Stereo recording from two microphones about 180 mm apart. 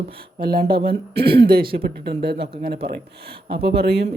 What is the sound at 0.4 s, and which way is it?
Speech, 60° right (ahead or behind).